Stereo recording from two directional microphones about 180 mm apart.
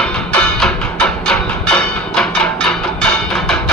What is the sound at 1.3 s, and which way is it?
Music, 5° left (ahead or behind).